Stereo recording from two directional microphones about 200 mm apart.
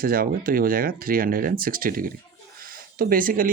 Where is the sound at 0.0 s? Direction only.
45° right (ahead or behind).